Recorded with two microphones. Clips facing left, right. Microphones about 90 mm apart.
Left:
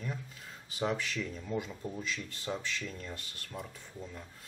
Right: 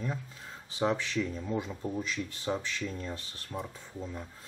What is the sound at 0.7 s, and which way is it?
Speech, 25° right (ahead or behind).